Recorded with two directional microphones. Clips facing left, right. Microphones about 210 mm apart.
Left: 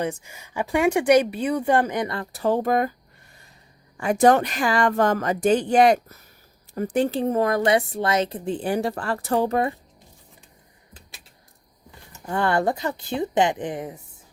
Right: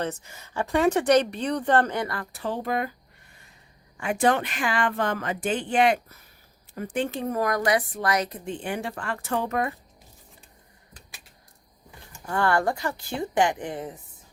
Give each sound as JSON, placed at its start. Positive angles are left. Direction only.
{"t": 0.0, "sound": "speech", "side_deg": 10}
{"t": 2.3, "sound": "speech", "side_deg": 45}
{"t": 3.9, "sound": "a woman's voice", "side_deg": 40}
{"t": 12.2, "sound": "speech", "side_deg": 20}